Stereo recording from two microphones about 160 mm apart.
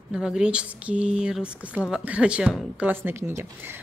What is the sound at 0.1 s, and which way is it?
Speech, 5° right (ahead or behind).